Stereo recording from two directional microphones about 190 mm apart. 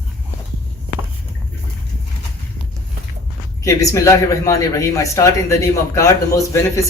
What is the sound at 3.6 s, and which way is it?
Speech, 15° left (ahead or behind).